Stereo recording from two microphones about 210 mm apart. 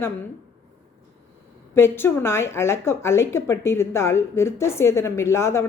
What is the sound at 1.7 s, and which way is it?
Speech, 10° left (ahead or behind).